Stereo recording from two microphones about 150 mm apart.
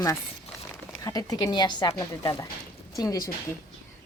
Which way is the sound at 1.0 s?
25° left (ahead or behind).